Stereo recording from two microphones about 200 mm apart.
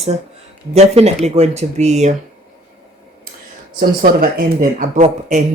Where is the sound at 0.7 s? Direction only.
30° right (ahead or behind).